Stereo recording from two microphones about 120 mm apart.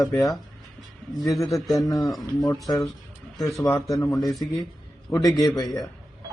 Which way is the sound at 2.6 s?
30° left (ahead or behind).